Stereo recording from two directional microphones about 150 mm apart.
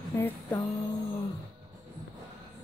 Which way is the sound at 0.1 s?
20° left (ahead or behind).